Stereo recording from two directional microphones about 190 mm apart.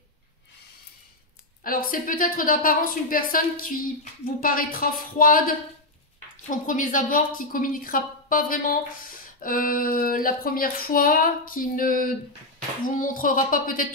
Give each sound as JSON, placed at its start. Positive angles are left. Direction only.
{"t": 1.6, "sound": "a woman's voice", "side_deg": 50}
{"t": 6.6, "sound": "a woman's voice", "side_deg": 45}